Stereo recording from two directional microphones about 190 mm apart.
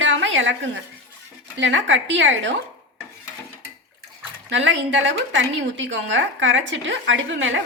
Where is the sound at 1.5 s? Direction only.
80° right.